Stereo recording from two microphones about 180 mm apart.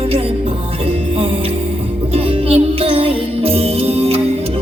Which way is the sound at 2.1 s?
35° right (ahead or behind).